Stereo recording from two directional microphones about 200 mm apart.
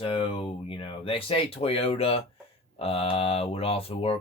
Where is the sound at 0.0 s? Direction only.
25° left (ahead or behind).